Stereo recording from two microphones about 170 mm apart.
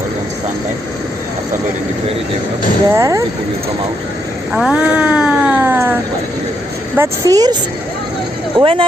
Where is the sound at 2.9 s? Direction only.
20° right (ahead or behind).